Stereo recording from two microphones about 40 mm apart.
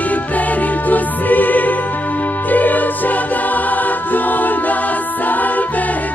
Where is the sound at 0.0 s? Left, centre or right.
Left.